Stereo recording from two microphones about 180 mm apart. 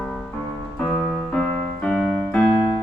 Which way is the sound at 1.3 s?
5° left (ahead or behind).